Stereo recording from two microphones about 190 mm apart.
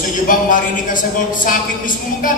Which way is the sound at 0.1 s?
45° left (ahead or behind).